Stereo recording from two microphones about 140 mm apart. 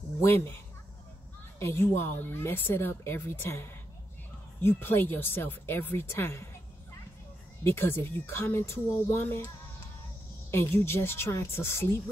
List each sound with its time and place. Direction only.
0.2 s speech: 15° left (ahead or behind)
1.6 s speech: 15° left (ahead or behind)
7.6 s speech: 15° left (ahead or behind)
10.5 s speech: 15° left (ahead or behind)